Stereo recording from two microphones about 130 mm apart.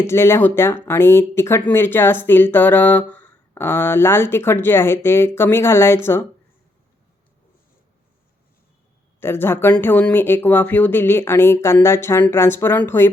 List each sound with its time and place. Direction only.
0.0 s speech: 20° left (ahead or behind)
9.2 s speech: 20° left (ahead or behind)